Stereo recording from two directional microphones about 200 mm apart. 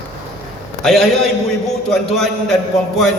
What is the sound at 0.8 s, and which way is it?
A man's voice, centre (ahead or behind).